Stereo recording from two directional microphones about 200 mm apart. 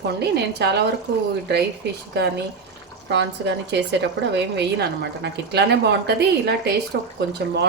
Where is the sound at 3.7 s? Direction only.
60° right (ahead or behind).